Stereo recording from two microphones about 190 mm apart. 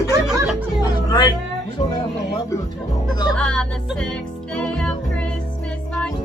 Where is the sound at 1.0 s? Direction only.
20° left (ahead or behind).